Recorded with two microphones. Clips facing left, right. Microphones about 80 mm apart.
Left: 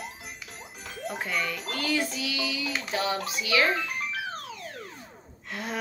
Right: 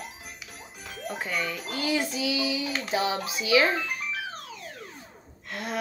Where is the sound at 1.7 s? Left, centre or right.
Centre.